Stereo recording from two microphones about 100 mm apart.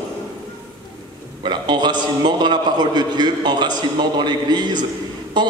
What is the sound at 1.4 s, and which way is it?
A man's voice, 45° right (ahead or behind).